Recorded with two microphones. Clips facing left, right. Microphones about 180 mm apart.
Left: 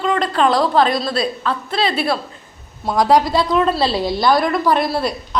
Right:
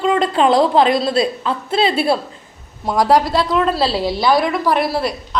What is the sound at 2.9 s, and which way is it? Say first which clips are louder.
A woman's voice: even; 5° right (ahead or behind).